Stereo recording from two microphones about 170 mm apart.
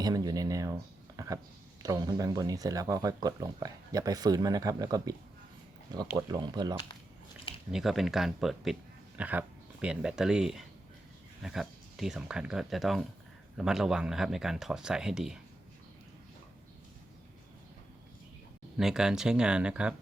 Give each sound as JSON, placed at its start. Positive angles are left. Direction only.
{"t": 0.0, "sound": "a sound", "side_deg": -25}
{"t": 1.8, "sound": "speech", "side_deg": -20}
{"t": 6.1, "sound": "speech", "side_deg": -20}
{"t": 7.7, "sound": "speech", "side_deg": 0}
{"t": 18.8, "sound": "speech", "side_deg": -5}